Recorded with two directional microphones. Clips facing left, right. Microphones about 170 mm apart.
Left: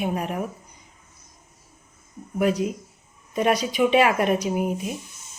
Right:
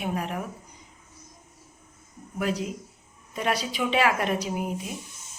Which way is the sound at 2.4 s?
15° left (ahead or behind).